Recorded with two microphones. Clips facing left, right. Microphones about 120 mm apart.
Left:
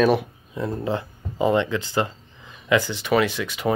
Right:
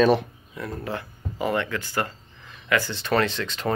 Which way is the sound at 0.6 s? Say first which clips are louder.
Left 6 dB; 25° left (ahead or behind).